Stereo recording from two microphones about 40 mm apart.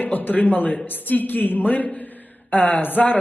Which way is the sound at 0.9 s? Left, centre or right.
Left.